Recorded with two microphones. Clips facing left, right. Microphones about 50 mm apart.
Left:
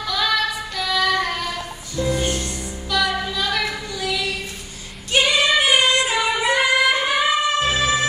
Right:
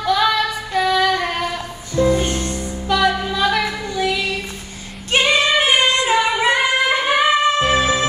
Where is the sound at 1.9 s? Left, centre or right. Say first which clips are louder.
Right 5 dB; right.